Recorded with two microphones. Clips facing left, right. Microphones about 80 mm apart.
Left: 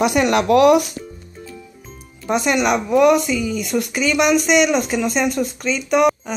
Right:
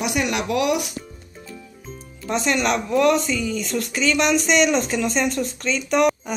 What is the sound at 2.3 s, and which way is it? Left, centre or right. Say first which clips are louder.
Speech: left 4 dB; centre.